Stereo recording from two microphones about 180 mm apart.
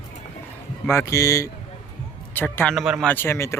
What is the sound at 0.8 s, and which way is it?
A man's voice, 15° left (ahead or behind).